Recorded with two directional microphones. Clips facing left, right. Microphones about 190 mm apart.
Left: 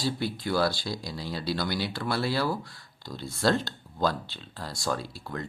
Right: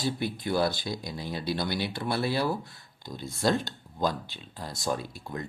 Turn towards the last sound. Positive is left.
turn(degrees=-20)  # may be behind; listen again after turning